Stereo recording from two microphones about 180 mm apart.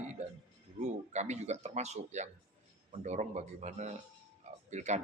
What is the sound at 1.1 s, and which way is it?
Speech, 40° right (ahead or behind).